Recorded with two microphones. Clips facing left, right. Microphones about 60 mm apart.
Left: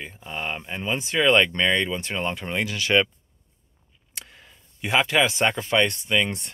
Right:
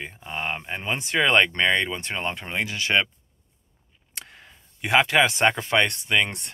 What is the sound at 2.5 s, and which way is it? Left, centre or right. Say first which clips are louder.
Speech: left 2 dB; right.